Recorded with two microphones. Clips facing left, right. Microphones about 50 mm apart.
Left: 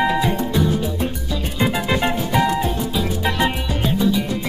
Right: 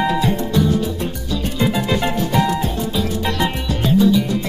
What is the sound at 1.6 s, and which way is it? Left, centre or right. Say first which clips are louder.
Music: even; centre.